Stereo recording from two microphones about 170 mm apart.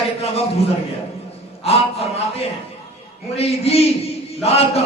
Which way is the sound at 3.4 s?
35° left (ahead or behind).